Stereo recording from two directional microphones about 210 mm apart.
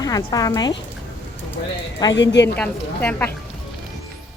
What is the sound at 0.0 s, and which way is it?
Speech, 20° left (ahead or behind).